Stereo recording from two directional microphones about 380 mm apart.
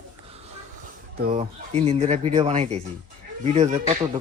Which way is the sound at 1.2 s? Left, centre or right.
Centre.